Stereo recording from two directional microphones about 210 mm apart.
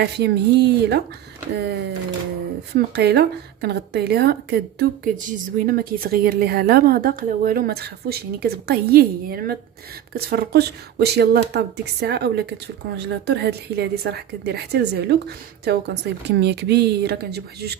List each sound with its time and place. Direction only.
0.0 s a woman's voice: 50° right (ahead or behind)
2.7 s a woman's voice: 50° right (ahead or behind)